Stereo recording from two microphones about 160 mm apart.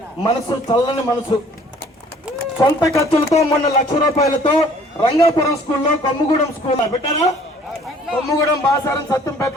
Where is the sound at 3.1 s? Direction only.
40° left (ahead or behind).